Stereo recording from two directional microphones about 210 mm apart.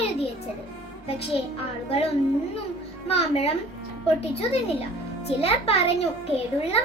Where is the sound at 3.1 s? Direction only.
30° left (ahead or behind).